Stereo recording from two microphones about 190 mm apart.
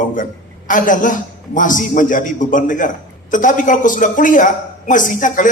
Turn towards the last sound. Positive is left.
turn(degrees=45)  # may be behind; listen again after turning